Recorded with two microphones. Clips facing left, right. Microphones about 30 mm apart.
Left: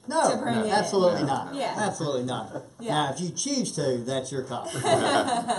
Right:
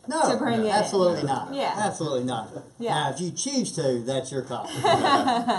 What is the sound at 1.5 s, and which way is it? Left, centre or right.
A woman's voice, centre.